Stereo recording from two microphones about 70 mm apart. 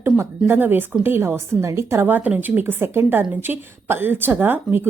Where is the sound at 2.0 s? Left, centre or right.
Right.